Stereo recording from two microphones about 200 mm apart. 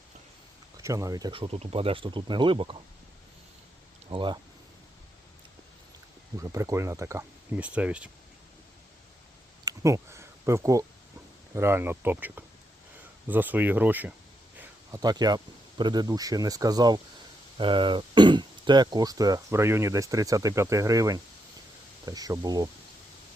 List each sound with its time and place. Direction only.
0.8 s speech: 15° right (ahead or behind)
4.1 s speech: 25° right (ahead or behind)
6.3 s speech: 15° right (ahead or behind)
9.6 s speech: 15° right (ahead or behind)
14.6 s a sound: 15° right (ahead or behind)
15.8 s speech: 20° right (ahead or behind)